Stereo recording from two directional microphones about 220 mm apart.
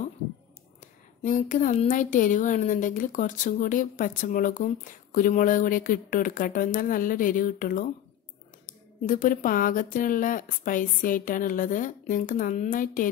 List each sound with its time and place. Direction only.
1.2 s speech: 35° left (ahead or behind)